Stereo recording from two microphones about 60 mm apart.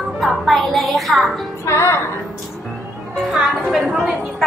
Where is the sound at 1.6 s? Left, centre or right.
Left.